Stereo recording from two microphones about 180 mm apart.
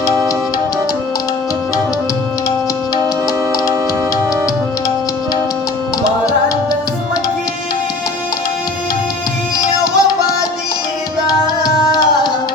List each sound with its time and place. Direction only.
9.8 s music: 20° left (ahead or behind)